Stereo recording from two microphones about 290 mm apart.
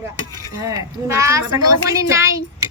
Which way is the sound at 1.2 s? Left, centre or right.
Centre.